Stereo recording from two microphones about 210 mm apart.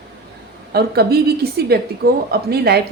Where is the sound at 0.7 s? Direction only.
50° right (ahead or behind).